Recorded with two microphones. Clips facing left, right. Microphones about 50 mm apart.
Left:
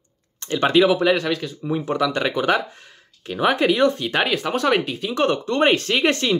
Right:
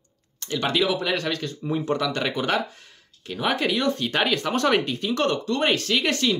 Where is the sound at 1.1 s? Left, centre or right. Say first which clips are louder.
Left 5 dB; centre.